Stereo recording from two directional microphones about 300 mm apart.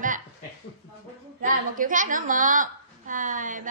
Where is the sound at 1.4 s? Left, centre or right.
Right.